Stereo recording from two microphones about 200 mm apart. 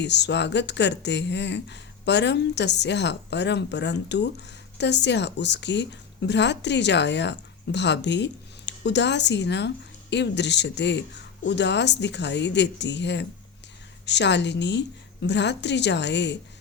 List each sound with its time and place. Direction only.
0.0 s speech: 60° left (ahead or behind)